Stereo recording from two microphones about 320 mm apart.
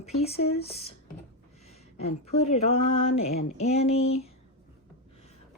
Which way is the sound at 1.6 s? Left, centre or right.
Centre.